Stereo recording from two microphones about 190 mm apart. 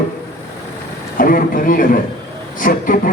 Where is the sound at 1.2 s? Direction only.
50° left (ahead or behind).